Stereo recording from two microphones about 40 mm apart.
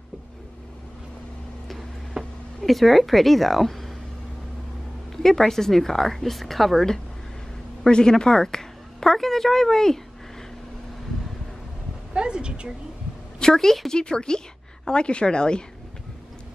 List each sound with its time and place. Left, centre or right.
2.2 s a sound: centre
2.6 s a woman's voice: centre
5.1 s speech: centre
7.8 s a woman's voice: centre
12.1 s a woman's voice: right
13.4 s a woman's voice: centre
13.9 s a woman's voice: left